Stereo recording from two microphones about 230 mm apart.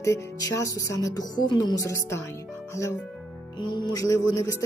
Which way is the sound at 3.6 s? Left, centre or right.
Centre.